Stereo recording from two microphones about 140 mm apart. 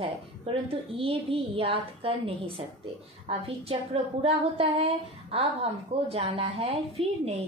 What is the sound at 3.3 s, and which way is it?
A woman's voice, 40° right (ahead or behind).